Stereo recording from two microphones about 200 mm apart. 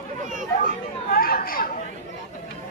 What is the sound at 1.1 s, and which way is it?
Chatter, 45° left (ahead or behind).